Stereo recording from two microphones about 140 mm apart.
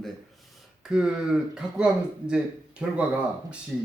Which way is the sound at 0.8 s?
5° right (ahead or behind).